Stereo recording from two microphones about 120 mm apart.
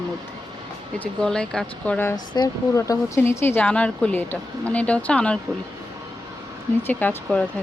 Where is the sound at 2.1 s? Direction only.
35° left (ahead or behind); by 5.4 s 10° left (ahead or behind).